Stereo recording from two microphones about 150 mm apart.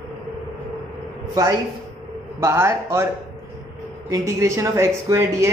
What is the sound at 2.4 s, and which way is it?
A man's voice, 20° right (ahead or behind).